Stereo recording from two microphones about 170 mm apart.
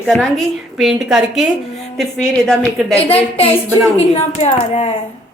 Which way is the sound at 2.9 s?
35° left (ahead or behind).